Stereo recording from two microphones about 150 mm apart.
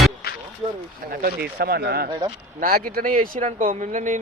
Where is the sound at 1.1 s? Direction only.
90° right.